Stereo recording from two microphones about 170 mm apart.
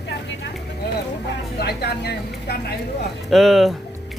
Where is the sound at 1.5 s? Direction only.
75° left (ahead or behind).